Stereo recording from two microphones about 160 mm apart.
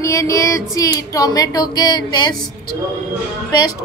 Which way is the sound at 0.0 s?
20° left (ahead or behind).